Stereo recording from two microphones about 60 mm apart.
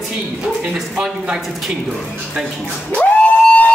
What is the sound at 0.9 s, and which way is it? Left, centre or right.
Speech, centre.